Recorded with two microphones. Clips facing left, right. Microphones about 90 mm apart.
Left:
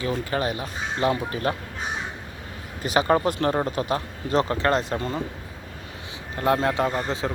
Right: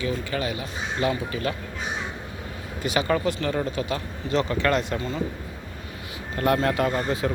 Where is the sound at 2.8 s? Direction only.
35° left (ahead or behind).